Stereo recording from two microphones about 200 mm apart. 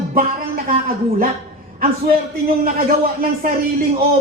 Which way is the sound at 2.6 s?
45° right (ahead or behind).